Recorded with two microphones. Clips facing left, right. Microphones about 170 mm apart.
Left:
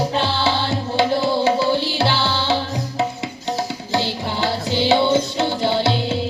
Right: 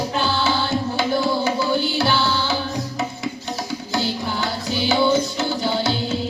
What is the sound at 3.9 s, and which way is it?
Music, 25° left (ahead or behind).